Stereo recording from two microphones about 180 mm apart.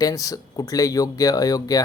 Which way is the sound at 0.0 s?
20° left (ahead or behind).